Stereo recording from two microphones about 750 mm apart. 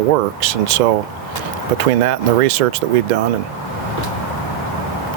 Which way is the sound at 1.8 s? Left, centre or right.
Right.